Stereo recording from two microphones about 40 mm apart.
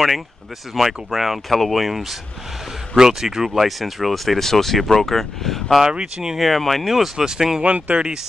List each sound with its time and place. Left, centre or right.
0.7 s speech: centre
5.8 s speech: centre
6.3 s speech: centre
6.9 s speech: centre
7.6 s speech: right